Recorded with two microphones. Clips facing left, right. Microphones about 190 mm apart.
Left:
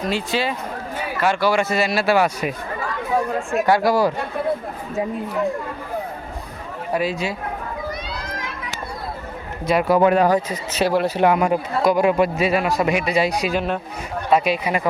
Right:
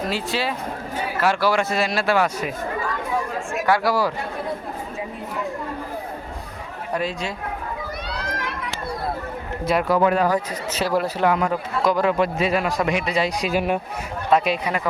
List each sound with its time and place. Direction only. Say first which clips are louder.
0.1 s speech: left 2 dB; centre (ahead or behind)
3.8 s speech: left 4 dB; 20° left (ahead or behind)
6.9 s speech: left 3 dB; 5° left (ahead or behind)
9.6 s speech: left 2 dB; centre (ahead or behind)
10.0 s speech: left 3 dB; 20° left (ahead or behind)
13.5 s a man's voice: right 1 dB; 10° right (ahead or behind)
14.3 s speech: left 1 dB; 5° left (ahead or behind)